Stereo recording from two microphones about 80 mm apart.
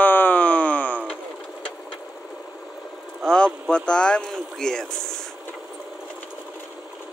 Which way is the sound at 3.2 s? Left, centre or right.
Centre.